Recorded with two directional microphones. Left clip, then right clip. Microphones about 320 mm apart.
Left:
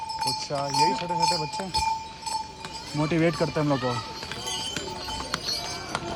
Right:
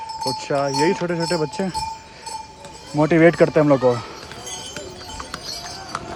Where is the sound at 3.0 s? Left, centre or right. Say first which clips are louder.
Right 11 dB; right.